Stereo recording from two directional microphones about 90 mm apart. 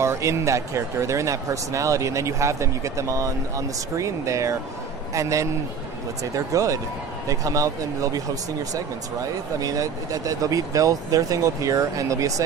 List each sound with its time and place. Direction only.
0.0 s speech: 30° right (ahead or behind)
9.6 s speech: 40° right (ahead or behind)